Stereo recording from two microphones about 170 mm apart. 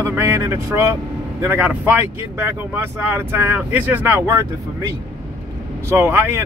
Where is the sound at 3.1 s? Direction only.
10° right (ahead or behind).